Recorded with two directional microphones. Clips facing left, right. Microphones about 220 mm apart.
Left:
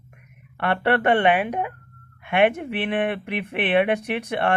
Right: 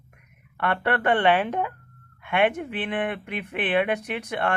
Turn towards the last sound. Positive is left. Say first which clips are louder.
# left 4 dB
turn(degrees=25)  # may be behind; listen again after turning